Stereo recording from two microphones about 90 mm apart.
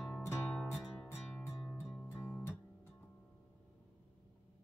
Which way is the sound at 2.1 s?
25° left (ahead or behind).